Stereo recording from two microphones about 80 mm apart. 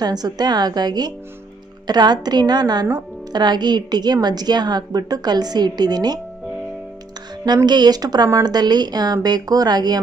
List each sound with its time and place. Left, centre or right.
0.0 s a woman's voice: right
7.4 s a woman's voice: right